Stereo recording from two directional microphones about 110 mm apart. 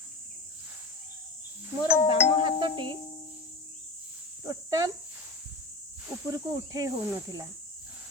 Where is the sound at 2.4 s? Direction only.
45° right (ahead or behind).